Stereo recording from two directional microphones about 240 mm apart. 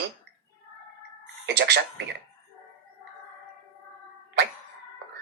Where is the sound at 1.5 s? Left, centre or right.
Right.